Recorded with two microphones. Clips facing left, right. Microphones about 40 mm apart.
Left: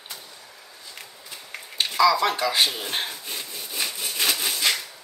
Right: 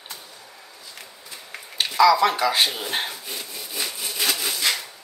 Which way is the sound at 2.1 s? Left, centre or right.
Centre.